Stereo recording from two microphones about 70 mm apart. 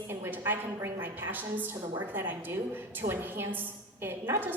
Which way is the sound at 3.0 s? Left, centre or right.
Right.